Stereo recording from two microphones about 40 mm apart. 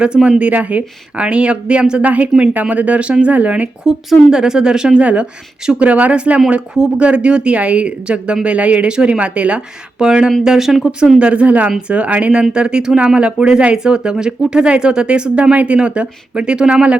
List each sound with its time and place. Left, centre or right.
0.0 s speech: right
0.5 s speech: right
2.0 s speech: right
3.8 s speech: centre
4.9 s speech: right
10.1 s speech: centre
11.2 s speech: right